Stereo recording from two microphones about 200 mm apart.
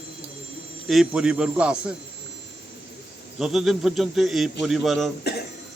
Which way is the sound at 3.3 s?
Centre (ahead or behind).